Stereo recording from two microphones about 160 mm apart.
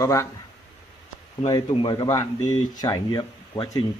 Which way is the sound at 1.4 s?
30° left (ahead or behind).